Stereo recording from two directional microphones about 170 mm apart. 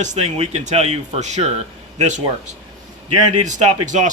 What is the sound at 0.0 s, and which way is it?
A man's voice, 45° right (ahead or behind).